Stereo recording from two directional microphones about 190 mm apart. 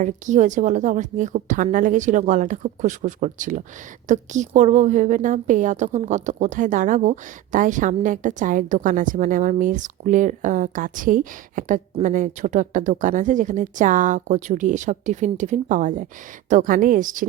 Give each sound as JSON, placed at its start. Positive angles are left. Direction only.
{"t": 0.0, "sound": "a woman's voice", "side_deg": -40}